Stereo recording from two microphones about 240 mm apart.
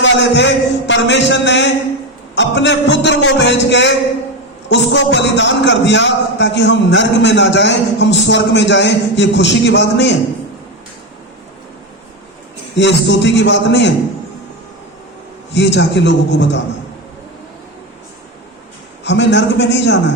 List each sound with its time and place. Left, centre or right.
0.0 s a man's voice: left
12.7 s a man's voice: left
15.5 s a man's voice: left
19.0 s a man's voice: left